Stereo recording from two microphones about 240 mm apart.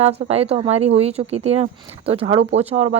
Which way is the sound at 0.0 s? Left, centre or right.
Right.